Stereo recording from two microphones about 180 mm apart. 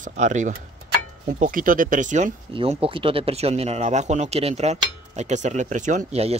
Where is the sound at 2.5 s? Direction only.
30° right (ahead or behind).